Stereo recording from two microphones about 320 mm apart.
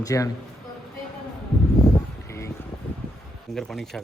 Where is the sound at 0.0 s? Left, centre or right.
Centre.